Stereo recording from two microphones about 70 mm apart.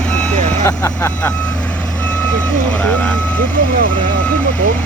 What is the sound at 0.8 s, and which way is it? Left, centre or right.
Speech, left.